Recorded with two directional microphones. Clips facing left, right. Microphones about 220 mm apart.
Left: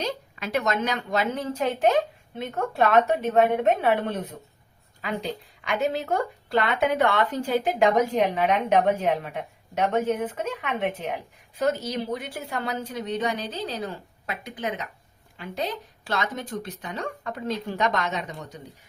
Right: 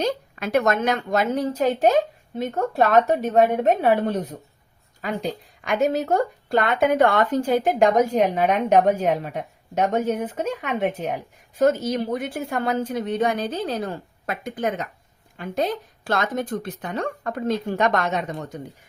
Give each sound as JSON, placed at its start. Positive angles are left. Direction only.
{"t": 0.0, "sound": "speech", "side_deg": -50}